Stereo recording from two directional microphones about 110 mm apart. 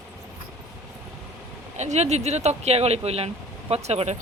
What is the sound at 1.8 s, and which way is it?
Speech, 90° right.